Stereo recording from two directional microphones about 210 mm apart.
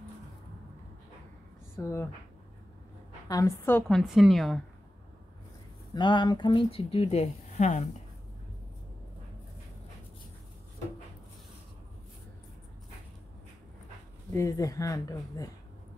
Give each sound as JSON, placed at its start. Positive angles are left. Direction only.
{"t": 1.8, "sound": "speech", "side_deg": 15}
{"t": 3.3, "sound": "speech", "side_deg": 15}
{"t": 4.0, "sound": "a woman's voice", "side_deg": 0}
{"t": 5.9, "sound": "speech", "side_deg": 20}
{"t": 14.3, "sound": "speech", "side_deg": 15}